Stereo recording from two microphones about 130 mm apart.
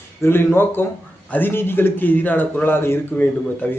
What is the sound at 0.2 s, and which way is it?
A man's voice, 20° left (ahead or behind).